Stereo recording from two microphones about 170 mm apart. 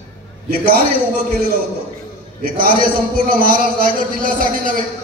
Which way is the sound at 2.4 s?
60° right (ahead or behind).